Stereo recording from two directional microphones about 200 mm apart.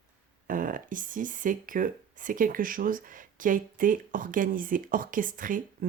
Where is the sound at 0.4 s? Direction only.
45° right (ahead or behind).